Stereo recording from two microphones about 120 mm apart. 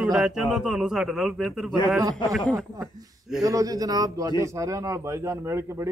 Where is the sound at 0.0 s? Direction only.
5° right (ahead or behind).